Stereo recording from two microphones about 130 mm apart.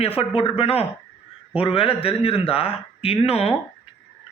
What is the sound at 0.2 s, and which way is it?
Speech, 50° left (ahead or behind).